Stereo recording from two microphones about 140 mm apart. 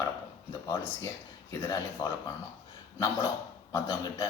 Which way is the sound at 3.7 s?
25° left (ahead or behind).